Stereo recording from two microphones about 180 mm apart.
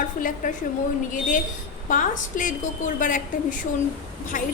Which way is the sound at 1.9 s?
45° left (ahead or behind).